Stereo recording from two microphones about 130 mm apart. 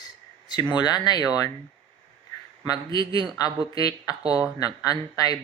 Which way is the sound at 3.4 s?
30° left (ahead or behind).